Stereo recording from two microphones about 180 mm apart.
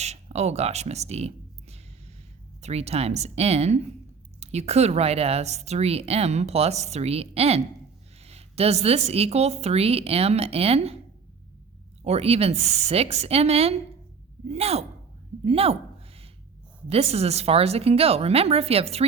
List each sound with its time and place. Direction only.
0.0 s speech: 35° right (ahead or behind)
2.6 s a woman's voice: 35° right (ahead or behind)
12.0 s a woman's voice: 35° right (ahead or behind)
15.4 s a sound: 35° right (ahead or behind)
16.9 s a woman's voice: 35° right (ahead or behind)